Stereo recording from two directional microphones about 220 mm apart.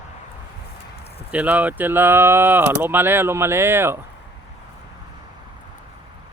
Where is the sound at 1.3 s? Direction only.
5° right (ahead or behind).